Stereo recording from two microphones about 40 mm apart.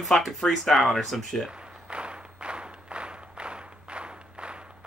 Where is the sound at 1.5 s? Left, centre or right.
Right.